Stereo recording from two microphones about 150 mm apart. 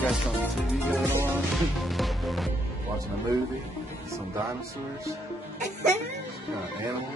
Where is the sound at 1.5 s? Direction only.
Centre (ahead or behind).